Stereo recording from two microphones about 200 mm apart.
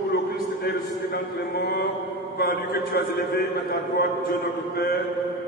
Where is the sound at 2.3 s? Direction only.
50° left (ahead or behind).